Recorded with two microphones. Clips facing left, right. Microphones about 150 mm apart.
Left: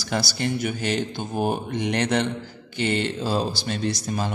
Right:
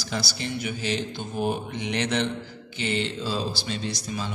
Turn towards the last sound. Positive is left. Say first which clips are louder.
# left 5 dB
turn(degrees=50)  # may be behind; listen again after turning